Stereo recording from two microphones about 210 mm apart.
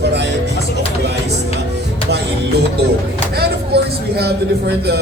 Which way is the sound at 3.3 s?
50° right (ahead or behind).